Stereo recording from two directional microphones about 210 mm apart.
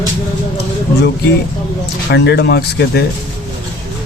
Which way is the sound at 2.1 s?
50° left (ahead or behind).